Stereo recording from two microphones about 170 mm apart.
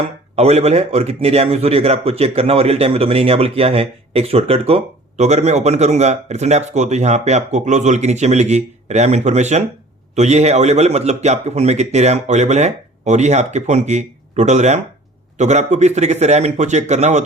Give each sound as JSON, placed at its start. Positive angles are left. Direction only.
{"t": 0.3, "sound": "a man's voice", "side_deg": -40}